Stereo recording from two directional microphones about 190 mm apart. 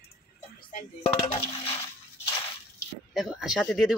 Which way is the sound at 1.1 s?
30° left (ahead or behind).